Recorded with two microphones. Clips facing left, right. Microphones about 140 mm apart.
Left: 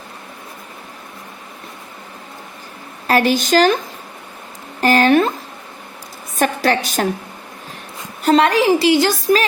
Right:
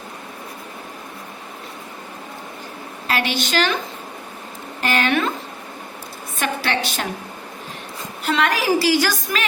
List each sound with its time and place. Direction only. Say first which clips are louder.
3.1 s a woman's voice: left 8 dB; 45° left (ahead or behind)
4.8 s a sound: left 7 dB; 40° left (ahead or behind)
6.4 s a woman's voice: left 6 dB; 40° left (ahead or behind)
8.2 s a woman's voice: left 8 dB; 40° left (ahead or behind)
8.4 s a child's voice: left 5 dB; 25° left (ahead or behind)